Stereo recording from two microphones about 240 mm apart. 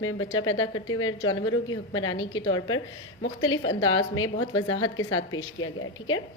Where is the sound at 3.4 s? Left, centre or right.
Left.